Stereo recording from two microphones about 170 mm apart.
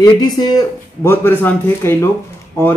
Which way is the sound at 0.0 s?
25° left (ahead or behind).